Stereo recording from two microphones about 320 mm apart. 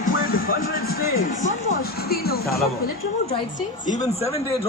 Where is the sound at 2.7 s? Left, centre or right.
Left.